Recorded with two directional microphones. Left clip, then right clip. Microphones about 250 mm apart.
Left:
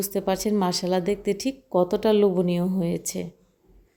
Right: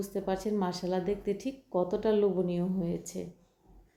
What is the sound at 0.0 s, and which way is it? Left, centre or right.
A woman's voice, left.